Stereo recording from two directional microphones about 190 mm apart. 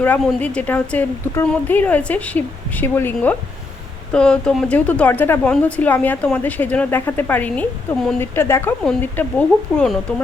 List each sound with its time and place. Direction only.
0.0 s speech: 10° left (ahead or behind)